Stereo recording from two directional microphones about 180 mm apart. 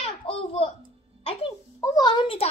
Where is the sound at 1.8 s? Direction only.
20° left (ahead or behind).